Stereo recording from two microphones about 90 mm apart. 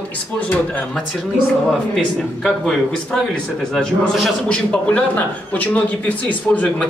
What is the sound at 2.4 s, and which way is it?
A man's voice, 5° left (ahead or behind).